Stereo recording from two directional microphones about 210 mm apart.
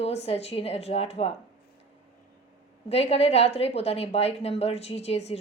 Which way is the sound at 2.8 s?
30° left (ahead or behind).